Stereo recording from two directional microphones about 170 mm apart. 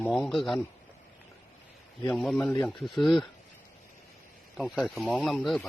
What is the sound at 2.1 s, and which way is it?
Speech, 5° left (ahead or behind).